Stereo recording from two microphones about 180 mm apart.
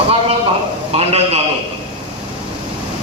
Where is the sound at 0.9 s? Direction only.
35° right (ahead or behind).